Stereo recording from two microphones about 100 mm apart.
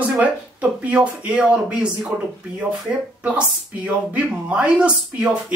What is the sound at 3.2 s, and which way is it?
Speech, 15° right (ahead or behind).